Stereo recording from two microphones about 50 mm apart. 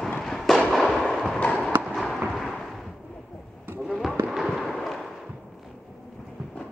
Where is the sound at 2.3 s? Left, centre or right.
Centre.